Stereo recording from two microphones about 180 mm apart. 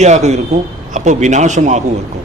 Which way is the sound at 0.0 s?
40° right (ahead or behind).